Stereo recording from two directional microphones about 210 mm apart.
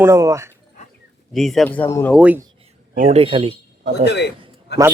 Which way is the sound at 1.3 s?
Centre (ahead or behind).